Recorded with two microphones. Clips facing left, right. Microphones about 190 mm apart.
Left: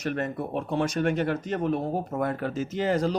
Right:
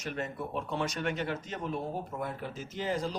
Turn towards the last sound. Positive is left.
turn(degrees=70)  # may be behind; listen again after turning